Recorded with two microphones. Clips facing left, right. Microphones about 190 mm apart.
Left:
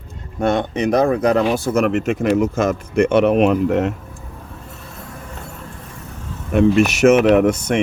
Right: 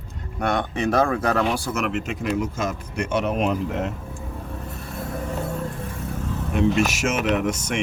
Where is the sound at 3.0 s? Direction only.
60° left (ahead or behind).